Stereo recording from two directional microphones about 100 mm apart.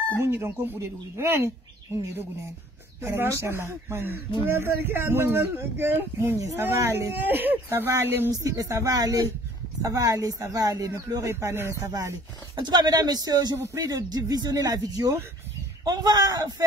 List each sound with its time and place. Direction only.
0.2 s speech: 25° right (ahead or behind)
3.0 s speech: 25° right (ahead or behind)
8.3 s speech: 35° right (ahead or behind)